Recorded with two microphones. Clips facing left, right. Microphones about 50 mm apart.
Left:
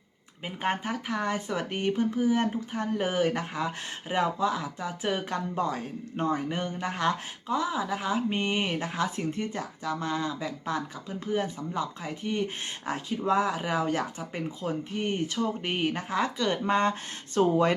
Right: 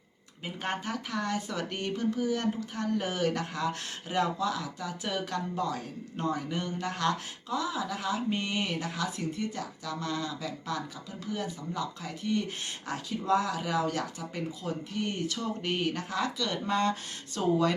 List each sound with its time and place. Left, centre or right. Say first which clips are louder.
0.4 s speech: left 4 dB; left